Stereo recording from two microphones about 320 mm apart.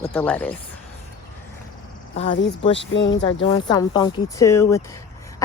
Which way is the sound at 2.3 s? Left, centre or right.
Left.